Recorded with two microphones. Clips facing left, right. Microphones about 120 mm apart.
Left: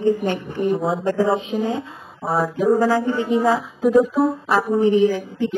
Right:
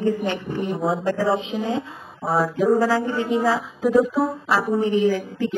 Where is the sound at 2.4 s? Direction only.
20° left (ahead or behind).